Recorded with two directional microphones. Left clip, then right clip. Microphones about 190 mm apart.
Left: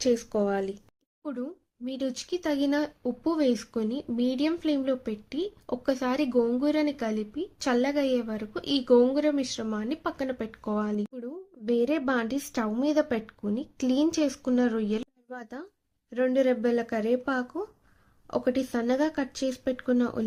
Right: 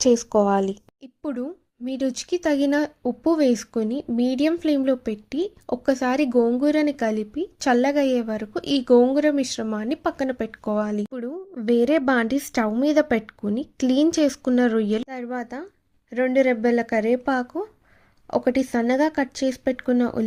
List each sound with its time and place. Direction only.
0.0 s speech: 30° right (ahead or behind)